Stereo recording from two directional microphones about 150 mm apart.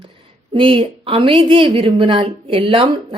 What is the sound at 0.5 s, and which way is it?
A woman's voice, 35° right (ahead or behind).